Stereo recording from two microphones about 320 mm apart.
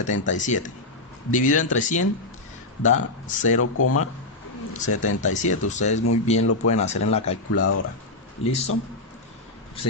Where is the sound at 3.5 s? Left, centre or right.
Left.